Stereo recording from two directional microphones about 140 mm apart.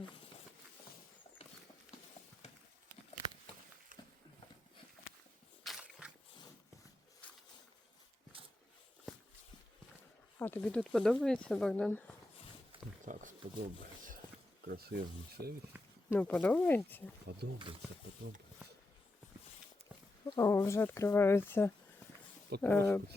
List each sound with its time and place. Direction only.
5.6 s a sound: centre (ahead or behind)
10.3 s speech: 15° left (ahead or behind)
13.1 s wild animals: 75° right (ahead or behind)
14.7 s speech: 90° right
15.7 s a sound: 10° right (ahead or behind)
16.1 s speech: 10° left (ahead or behind)
20.3 s speech: 20° left (ahead or behind)